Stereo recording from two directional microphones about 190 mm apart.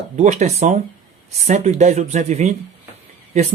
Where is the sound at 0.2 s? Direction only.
35° right (ahead or behind).